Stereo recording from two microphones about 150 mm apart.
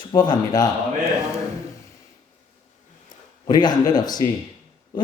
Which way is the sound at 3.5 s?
25° left (ahead or behind).